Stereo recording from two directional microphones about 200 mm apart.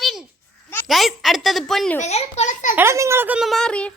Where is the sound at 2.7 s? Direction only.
15° right (ahead or behind); by 3.9 s 5° left (ahead or behind).